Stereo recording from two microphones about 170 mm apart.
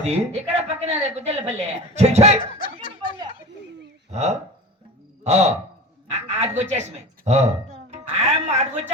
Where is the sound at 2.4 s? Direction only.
55° left (ahead or behind).